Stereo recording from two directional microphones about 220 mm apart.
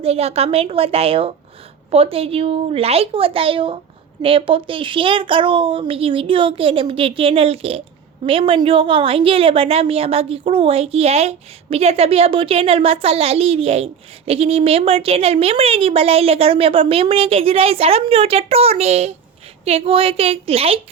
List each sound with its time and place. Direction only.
0.0 s a woman's voice: 30° right (ahead or behind)